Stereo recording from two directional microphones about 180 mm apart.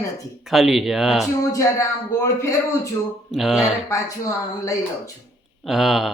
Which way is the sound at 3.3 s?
Centre (ahead or behind).